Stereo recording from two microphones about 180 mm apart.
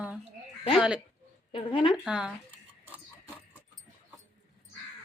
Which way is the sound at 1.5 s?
30° left (ahead or behind).